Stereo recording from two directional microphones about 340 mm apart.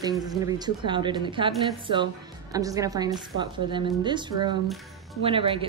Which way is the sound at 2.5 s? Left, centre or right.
Centre.